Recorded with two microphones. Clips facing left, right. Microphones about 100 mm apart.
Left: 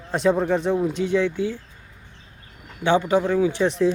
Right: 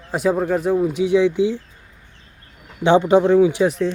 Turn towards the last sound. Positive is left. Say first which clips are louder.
# right 6 dB
turn(degrees=-15)  # may be behind; listen again after turning